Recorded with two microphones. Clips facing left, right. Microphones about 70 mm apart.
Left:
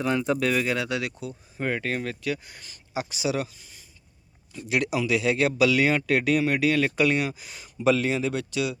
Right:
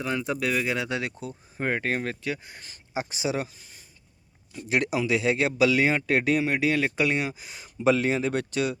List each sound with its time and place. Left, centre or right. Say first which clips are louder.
0.0 s speech: left 4 dB; centre
0.7 s speech: left 1 dB; right